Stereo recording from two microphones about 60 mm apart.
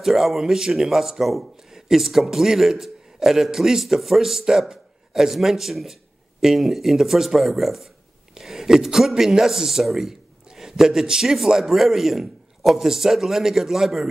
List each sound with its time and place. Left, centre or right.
0.0 s a man's voice: centre